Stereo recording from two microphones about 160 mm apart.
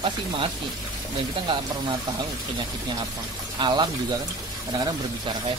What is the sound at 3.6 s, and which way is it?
Speech, 30° right (ahead or behind).